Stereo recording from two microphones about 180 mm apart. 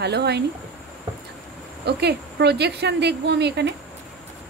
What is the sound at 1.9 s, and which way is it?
A woman's voice, 65° right (ahead or behind).